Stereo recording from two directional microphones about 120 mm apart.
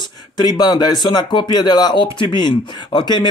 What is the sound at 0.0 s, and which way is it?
Speech, 35° left (ahead or behind).